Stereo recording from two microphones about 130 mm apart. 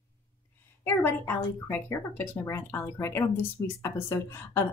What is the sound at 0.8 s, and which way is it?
A woman's voice, 15° left (ahead or behind).